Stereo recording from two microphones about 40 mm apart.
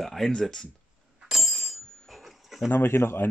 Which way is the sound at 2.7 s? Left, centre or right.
Left.